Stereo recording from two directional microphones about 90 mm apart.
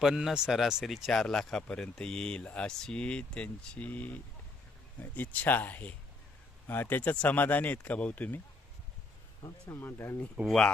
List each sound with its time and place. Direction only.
0.0 s speech: 5° right (ahead or behind); by 8.4 s 20° left (ahead or behind)
9.6 s speech: 30° left (ahead or behind)
10.4 s speech: 5° left (ahead or behind)